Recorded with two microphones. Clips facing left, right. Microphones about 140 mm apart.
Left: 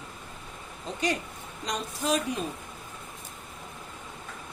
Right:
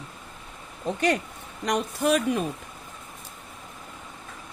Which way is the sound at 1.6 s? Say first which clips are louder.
Right 7 dB; 60° right (ahead or behind).